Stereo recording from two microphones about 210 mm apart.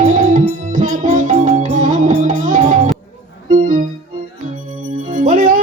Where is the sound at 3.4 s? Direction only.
40° right (ahead or behind).